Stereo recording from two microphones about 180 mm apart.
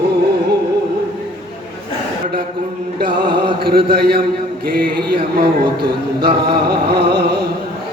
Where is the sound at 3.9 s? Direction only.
55° right (ahead or behind).